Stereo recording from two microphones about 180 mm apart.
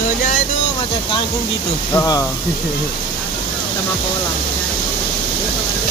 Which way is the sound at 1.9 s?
20° left (ahead or behind).